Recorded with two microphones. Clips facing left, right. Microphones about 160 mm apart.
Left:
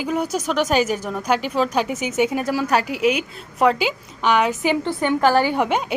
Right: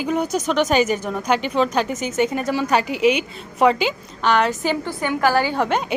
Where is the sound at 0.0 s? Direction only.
5° left (ahead or behind).